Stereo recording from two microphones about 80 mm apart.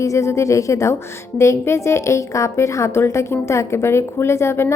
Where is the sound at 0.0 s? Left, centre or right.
Left.